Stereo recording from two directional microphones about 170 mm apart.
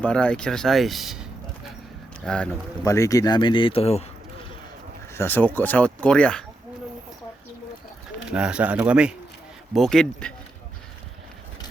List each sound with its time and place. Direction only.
0.0 s speech: 5° left (ahead or behind)
2.8 s speech: 20° left (ahead or behind); by 4.0 s 35° left (ahead or behind)
5.1 s speech: 10° left (ahead or behind)
8.2 s speech: 5° right (ahead or behind)